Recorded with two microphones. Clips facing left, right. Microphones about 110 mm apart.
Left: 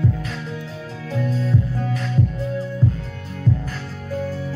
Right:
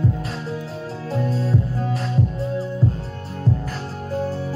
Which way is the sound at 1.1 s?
35° right (ahead or behind).